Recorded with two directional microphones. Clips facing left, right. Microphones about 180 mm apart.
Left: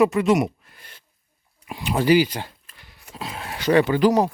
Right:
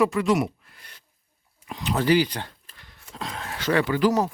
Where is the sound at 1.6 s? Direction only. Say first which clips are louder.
Left 3 dB; 10° left (ahead or behind).